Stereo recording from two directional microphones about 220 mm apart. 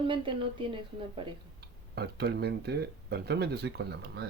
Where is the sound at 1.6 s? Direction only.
45° right (ahead or behind).